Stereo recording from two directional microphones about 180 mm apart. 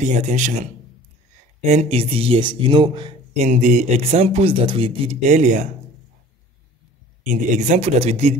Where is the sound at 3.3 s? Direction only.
45° right (ahead or behind).